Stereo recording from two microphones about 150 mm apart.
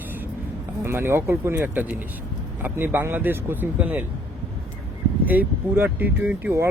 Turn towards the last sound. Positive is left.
turn(degrees=-15)  # may be behind; listen again after turning